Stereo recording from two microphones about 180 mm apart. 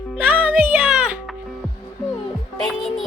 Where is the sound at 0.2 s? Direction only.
10° right (ahead or behind).